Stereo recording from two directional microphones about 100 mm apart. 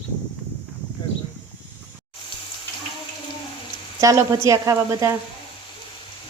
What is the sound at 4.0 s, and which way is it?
Speech, 35° right (ahead or behind).